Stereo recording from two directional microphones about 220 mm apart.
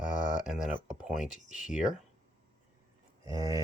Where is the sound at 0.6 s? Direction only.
5° right (ahead or behind).